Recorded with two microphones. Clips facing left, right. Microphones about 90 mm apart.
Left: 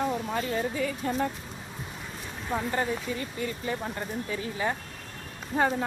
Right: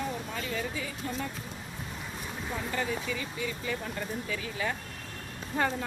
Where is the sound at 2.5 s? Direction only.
40° left (ahead or behind).